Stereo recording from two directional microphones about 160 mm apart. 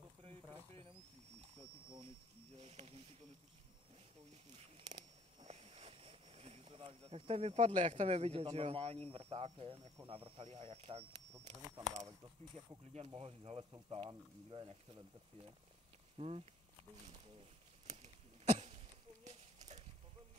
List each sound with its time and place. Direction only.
2.5 s speech: 45° right (ahead or behind)
4.7 s vehicle: 45° right (ahead or behind)
9.1 s speech: 40° right (ahead or behind)
12.9 s speech: 40° right (ahead or behind)
16.2 s speech: 40° right (ahead or behind)
17.8 s a sound: 45° right (ahead or behind)